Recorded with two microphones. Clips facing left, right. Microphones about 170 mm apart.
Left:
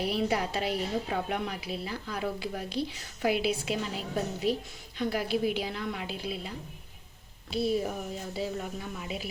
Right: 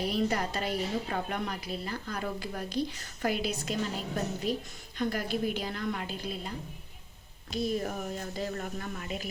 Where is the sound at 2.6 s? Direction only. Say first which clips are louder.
Right 1 dB; 45° right (ahead or behind).